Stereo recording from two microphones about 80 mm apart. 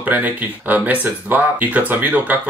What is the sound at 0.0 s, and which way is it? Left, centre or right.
Speech, right.